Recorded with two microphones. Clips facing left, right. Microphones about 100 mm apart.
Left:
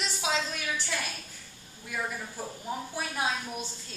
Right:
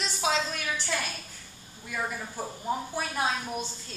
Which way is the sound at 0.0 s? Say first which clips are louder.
Right 2 dB; 5° left (ahead or behind).